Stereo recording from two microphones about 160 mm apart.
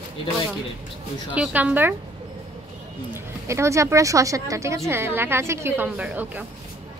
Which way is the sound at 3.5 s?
20° right (ahead or behind).